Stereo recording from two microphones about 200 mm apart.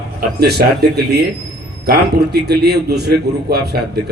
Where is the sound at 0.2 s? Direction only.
50° right (ahead or behind).